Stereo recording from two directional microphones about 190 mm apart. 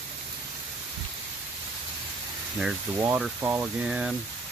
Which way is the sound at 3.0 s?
5° right (ahead or behind).